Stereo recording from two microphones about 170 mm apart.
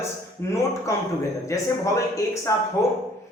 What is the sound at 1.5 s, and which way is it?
A man's voice, 20° left (ahead or behind).